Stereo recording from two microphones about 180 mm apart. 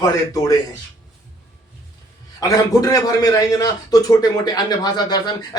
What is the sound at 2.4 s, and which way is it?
A man's voice, 20° left (ahead or behind).